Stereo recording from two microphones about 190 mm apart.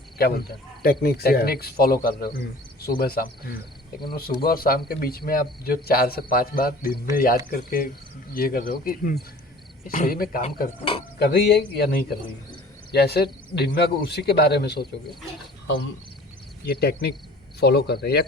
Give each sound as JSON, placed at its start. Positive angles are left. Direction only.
{"t": 0.2, "sound": "speech", "side_deg": 55}
{"t": 16.6, "sound": "speech", "side_deg": 55}